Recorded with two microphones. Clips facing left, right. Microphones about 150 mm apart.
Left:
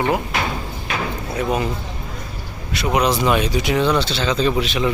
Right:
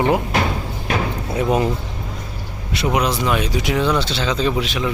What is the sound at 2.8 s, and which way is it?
Speech, 5° right (ahead or behind).